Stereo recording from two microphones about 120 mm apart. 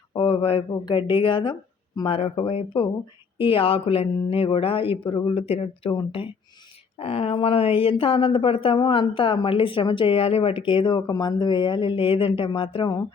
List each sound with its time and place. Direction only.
0.1 s speech: 45° left (ahead or behind)
5.9 s speech: 40° left (ahead or behind)
7.0 s speech: 55° left (ahead or behind)